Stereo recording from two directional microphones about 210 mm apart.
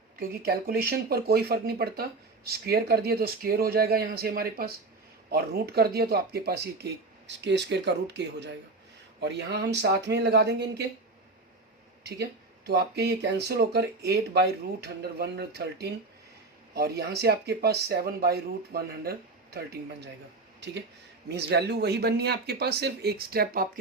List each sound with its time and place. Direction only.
0.2 s speech: 45° right (ahead or behind)
12.0 s speech: 50° right (ahead or behind)